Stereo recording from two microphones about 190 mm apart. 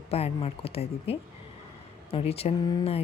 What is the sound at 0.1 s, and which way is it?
Speech, 30° left (ahead or behind).